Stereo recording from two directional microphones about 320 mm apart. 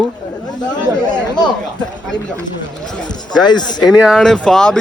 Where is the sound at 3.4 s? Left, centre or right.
Centre.